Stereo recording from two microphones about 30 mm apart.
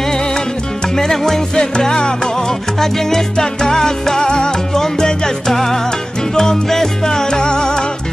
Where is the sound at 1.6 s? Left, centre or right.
Left.